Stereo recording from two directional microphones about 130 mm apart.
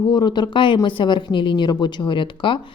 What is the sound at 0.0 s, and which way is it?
Speech, 35° left (ahead or behind).